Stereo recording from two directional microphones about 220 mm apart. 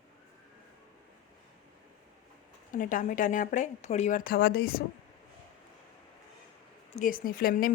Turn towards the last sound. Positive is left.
turn(degrees=40)  # may be behind; listen again after turning